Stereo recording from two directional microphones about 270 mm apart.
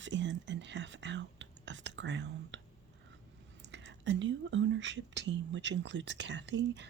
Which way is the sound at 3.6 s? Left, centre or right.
Right.